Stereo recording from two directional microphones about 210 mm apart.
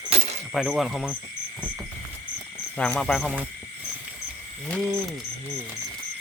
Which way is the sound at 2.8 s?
5° left (ahead or behind).